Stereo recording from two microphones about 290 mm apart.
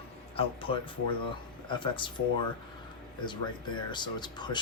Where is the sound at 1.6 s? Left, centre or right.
Centre.